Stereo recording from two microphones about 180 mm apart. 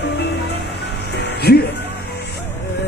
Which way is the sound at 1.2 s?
65° left (ahead or behind).